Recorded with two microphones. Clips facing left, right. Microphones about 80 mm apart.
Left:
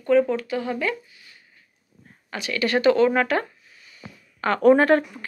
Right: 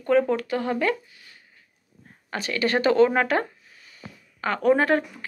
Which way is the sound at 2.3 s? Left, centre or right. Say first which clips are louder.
Left 1 dB; right.